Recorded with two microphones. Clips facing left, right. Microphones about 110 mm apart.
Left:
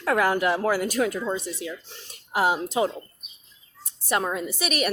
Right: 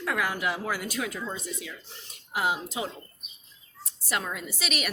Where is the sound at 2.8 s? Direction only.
50° left (ahead or behind).